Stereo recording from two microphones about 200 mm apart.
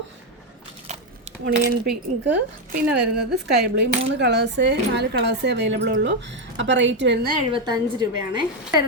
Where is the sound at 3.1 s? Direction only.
55° right (ahead or behind).